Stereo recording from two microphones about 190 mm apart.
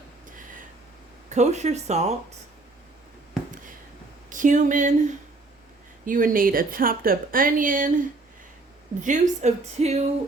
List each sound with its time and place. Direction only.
1.3 s a woman's voice: 35° right (ahead or behind)
4.3 s a woman's voice: 40° right (ahead or behind)
9.0 s a woman's voice: 40° right (ahead or behind)